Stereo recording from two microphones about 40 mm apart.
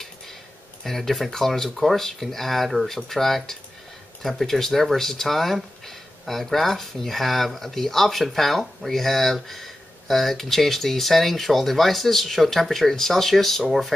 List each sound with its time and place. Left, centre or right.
0.8 s speech: centre